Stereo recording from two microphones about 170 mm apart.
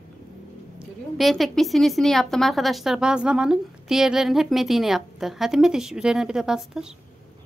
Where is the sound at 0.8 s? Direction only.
Centre (ahead or behind).